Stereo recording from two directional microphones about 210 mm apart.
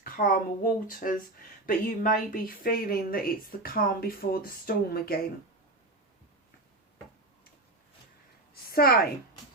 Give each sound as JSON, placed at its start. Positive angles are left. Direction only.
{"t": 0.0, "sound": "speech", "side_deg": 40}
{"t": 8.7, "sound": "speech", "side_deg": 45}